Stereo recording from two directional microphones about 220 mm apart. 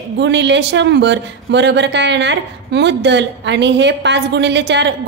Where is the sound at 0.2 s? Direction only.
50° right (ahead or behind).